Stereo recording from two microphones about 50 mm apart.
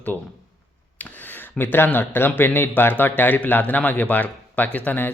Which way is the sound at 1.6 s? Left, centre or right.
Left.